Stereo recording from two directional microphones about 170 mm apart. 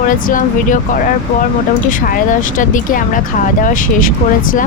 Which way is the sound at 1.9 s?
50° left (ahead or behind).